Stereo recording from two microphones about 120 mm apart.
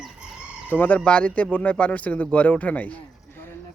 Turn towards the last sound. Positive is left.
turn(degrees=15)  # may be behind; listen again after turning